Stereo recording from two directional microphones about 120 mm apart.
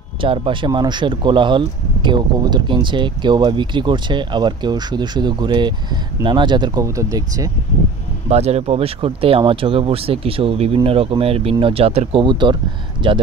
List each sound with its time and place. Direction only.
0.2 s speech: 45° right (ahead or behind); by 7.4 s 30° right (ahead or behind)
8.3 s speech: 60° right (ahead or behind); by 13.2 s 45° right (ahead or behind)